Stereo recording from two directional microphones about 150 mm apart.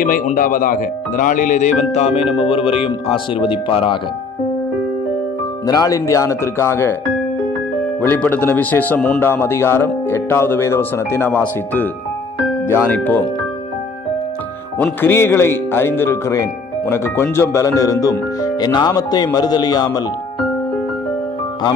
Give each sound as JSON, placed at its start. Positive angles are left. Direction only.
{"t": 0.0, "sound": "speech", "side_deg": 65}
{"t": 5.7, "sound": "speech", "side_deg": 25}
{"t": 8.1, "sound": "speech", "side_deg": 15}
{"t": 12.6, "sound": "speech", "side_deg": 15}
{"t": 14.8, "sound": "speech", "side_deg": 15}